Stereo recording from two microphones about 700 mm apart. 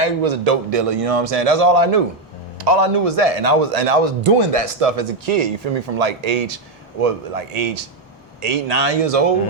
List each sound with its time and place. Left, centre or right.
0.0 s a man's voice: right